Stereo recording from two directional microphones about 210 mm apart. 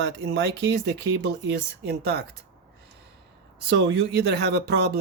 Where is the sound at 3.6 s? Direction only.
55° right (ahead or behind).